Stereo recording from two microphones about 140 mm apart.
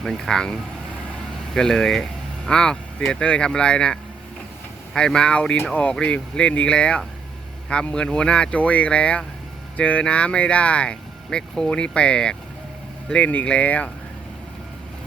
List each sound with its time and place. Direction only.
0.0 s speech: 5° left (ahead or behind)
4.9 s speech: 5° left (ahead or behind)